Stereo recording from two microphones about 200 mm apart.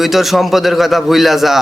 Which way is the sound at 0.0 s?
Centre (ahead or behind).